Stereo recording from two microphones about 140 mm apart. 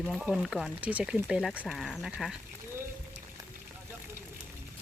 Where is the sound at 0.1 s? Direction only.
Centre (ahead or behind).